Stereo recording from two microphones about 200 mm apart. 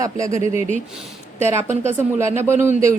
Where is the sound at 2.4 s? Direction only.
10° right (ahead or behind).